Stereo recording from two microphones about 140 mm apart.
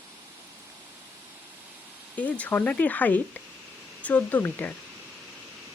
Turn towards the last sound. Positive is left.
turn(degrees=10)  # may be behind; listen again after turning